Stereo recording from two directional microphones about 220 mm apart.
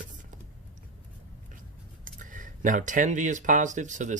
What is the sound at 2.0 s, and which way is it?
Speech, 35° right (ahead or behind).